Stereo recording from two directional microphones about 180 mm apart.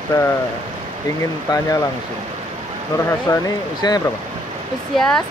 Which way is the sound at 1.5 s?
25° left (ahead or behind).